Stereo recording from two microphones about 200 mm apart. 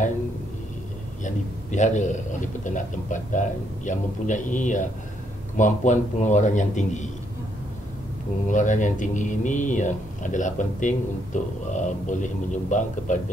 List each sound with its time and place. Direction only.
1.2 s speech: 35° left (ahead or behind)
8.5 s speech: 40° left (ahead or behind)